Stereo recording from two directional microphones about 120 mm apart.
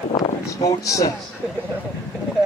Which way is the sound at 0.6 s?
30° left (ahead or behind).